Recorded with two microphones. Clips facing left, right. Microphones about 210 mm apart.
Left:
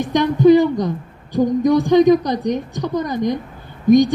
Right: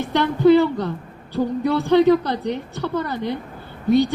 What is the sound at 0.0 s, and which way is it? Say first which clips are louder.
A woman's voice: left 3 dB; 15° left (ahead or behind).